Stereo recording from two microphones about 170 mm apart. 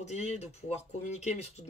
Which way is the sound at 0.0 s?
45° left (ahead or behind).